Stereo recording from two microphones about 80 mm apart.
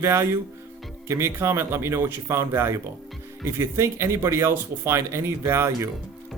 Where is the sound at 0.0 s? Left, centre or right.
Right.